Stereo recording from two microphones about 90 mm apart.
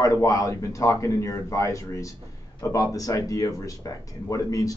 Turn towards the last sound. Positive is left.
turn(degrees=40)  # may be behind; listen again after turning